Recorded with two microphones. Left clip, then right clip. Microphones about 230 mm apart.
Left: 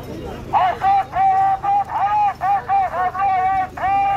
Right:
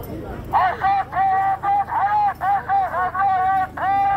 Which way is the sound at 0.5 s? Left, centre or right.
Right.